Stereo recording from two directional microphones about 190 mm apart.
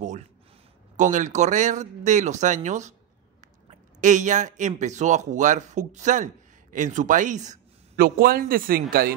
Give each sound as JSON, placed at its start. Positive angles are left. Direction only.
{"t": 0.9, "sound": "speech", "side_deg": -40}
{"t": 4.0, "sound": "speech", "side_deg": -40}